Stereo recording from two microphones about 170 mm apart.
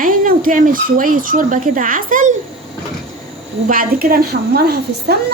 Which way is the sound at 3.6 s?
55° right (ahead or behind).